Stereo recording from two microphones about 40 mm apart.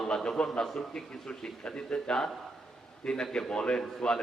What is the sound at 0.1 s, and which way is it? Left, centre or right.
A man's voice, left.